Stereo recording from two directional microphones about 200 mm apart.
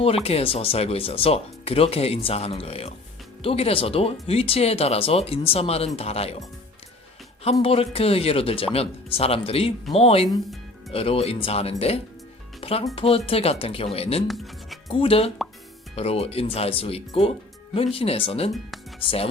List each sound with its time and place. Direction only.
0.0 s speech: 30° left (ahead or behind)
7.6 s speech: 30° left (ahead or behind)
14.3 s music: centre (ahead or behind)
14.8 s speech: 30° left (ahead or behind)